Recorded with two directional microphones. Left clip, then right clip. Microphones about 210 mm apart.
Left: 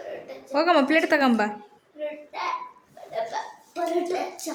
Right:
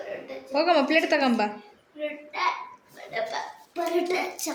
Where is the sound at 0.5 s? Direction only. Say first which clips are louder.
Left 1 dB; 20° left (ahead or behind).